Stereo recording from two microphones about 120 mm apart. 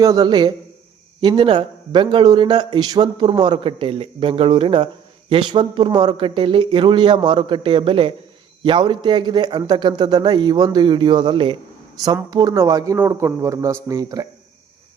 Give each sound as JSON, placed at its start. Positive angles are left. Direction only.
{"t": 0.0, "sound": "a man's voice", "side_deg": -35}
{"t": 12.3, "sound": "a man's voice", "side_deg": -35}